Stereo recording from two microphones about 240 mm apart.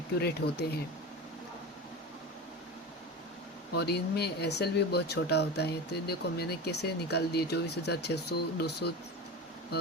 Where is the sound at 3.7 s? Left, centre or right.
Left.